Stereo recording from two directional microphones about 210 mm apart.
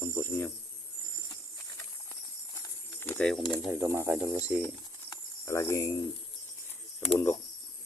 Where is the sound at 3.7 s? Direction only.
10° right (ahead or behind).